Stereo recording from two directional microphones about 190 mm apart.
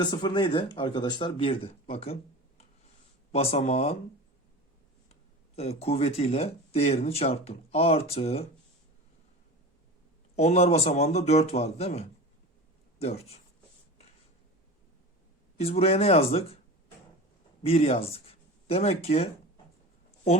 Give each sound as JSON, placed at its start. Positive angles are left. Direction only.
{"t": 0.0, "sound": "a man's voice", "side_deg": 25}
{"t": 3.3, "sound": "speech", "side_deg": 35}
{"t": 5.5, "sound": "speech", "side_deg": 30}
{"t": 10.3, "sound": "speech", "side_deg": 35}
{"t": 15.5, "sound": "speech", "side_deg": 30}
{"t": 17.6, "sound": "speech", "side_deg": 30}